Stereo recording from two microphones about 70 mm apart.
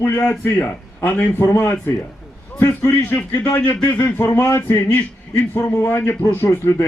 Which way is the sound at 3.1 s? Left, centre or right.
Left.